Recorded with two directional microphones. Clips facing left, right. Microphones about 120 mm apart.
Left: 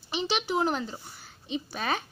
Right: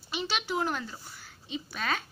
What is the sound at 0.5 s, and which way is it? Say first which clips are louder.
A woman's voice: left 3 dB; 20° left (ahead or behind).